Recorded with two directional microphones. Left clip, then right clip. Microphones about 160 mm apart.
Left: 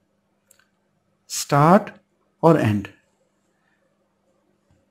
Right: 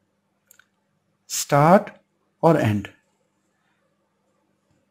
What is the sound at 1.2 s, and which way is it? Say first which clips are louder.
Speech: even; 5° right (ahead or behind).